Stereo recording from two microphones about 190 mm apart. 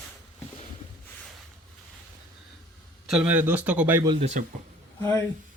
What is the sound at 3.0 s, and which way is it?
Speech, 5° right (ahead or behind).